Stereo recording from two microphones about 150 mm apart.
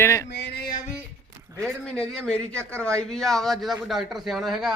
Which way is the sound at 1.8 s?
5° left (ahead or behind).